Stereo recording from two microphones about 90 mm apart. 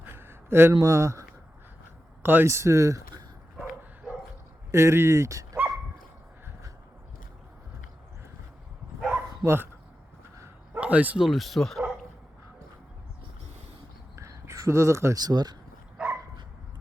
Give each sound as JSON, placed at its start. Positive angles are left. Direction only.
{"t": 0.0, "sound": "a sound", "side_deg": -25}
{"t": 0.8, "sound": "speech", "side_deg": -35}
{"t": 2.2, "sound": "speech", "side_deg": -25}
{"t": 4.7, "sound": "speech", "side_deg": -30}
{"t": 5.5, "sound": "dog", "side_deg": -25}
{"t": 9.4, "sound": "speech", "side_deg": -30}
{"t": 10.8, "sound": "speech", "side_deg": -15}
{"t": 11.3, "sound": "speech", "side_deg": 0}
{"t": 14.2, "sound": "a sound", "side_deg": -35}
{"t": 15.2, "sound": "speech", "side_deg": -50}